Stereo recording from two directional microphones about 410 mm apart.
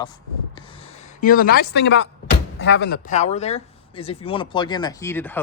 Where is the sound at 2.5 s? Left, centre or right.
Left; by 5.4 s centre.